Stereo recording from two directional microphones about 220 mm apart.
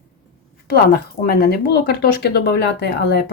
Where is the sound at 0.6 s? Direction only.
45° left (ahead or behind).